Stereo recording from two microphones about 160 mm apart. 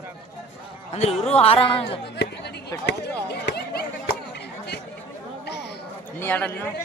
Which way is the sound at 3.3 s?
90° left.